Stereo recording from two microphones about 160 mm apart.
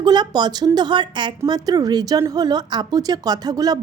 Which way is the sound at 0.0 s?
25° right (ahead or behind).